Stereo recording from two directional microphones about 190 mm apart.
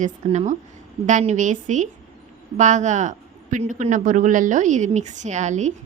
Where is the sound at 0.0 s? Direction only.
40° right (ahead or behind).